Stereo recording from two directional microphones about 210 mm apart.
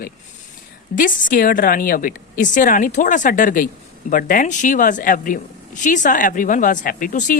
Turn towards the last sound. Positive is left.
turn(degrees=40)  # may be behind; listen again after turning